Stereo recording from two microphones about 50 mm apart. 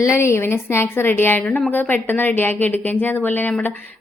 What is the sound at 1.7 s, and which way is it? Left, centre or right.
A woman's voice, left.